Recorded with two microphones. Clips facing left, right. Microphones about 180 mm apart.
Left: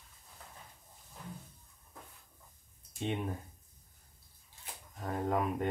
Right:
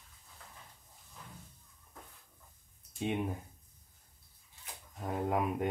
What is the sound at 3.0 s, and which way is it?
Speech, 5° right (ahead or behind).